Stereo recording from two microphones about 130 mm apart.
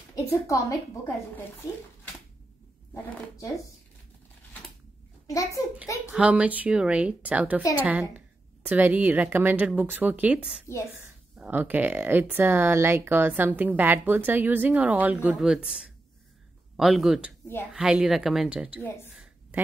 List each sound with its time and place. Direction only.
0.1 s a woman's voice: 25° left (ahead or behind)
5.2 s a child's voice: 25° left (ahead or behind)
6.1 s speech: 10° right (ahead or behind)
19.0 s a sound: 15° right (ahead or behind)